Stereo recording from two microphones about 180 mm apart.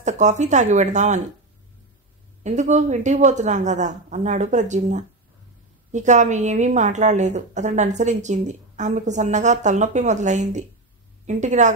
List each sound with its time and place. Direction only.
0.0 s a woman's voice: 40° right (ahead or behind)
2.4 s a woman's voice: 40° right (ahead or behind)